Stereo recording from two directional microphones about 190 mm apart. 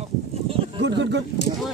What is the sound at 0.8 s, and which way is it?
Speech, 65° right (ahead or behind).